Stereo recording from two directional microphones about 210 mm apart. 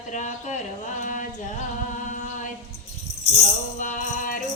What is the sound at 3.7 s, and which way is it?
Music, 40° left (ahead or behind).